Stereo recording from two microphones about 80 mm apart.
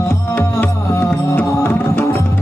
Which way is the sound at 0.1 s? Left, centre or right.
Left.